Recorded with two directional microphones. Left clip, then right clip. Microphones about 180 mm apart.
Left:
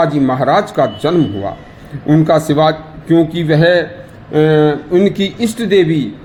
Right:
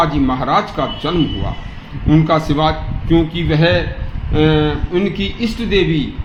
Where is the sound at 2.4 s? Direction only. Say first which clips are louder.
Left 4 dB; 55° left (ahead or behind).